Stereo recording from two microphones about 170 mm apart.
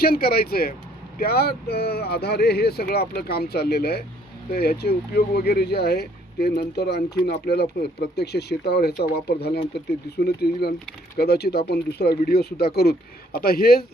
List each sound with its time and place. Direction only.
0.0 s speech: 60° left (ahead or behind)